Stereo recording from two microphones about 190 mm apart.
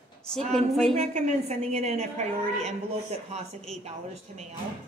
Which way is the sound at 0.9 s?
35° right (ahead or behind).